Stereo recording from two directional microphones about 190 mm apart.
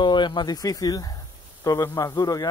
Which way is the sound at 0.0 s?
25° left (ahead or behind).